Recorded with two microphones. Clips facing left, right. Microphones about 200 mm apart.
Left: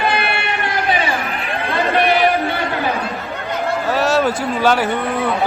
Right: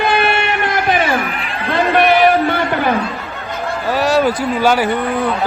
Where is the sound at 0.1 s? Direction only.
45° right (ahead or behind).